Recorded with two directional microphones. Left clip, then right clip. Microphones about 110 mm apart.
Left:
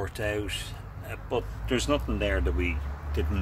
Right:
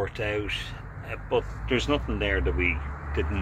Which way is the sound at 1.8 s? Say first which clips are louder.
Even; 55° left (ahead or behind).